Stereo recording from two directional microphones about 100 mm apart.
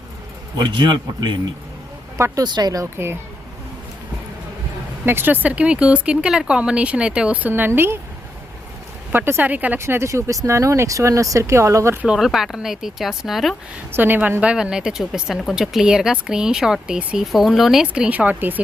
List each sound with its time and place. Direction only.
0.5 s speech: 50° right (ahead or behind)
2.1 s speech: 30° right (ahead or behind)
2.4 s speech: 40° right (ahead or behind)
2.8 s speech: 25° right (ahead or behind)
5.0 s speech: 20° right (ahead or behind)
9.1 s speech: 20° right (ahead or behind)
9.8 s speech: 25° right (ahead or behind)
12.0 s speech: 5° right (ahead or behind)
13.9 s speech: 20° right (ahead or behind)